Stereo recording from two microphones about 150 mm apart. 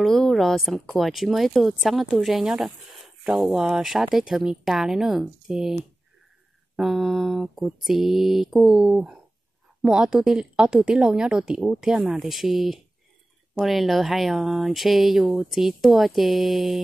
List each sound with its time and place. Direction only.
0.0 s speech: centre (ahead or behind)
6.8 s speech: centre (ahead or behind)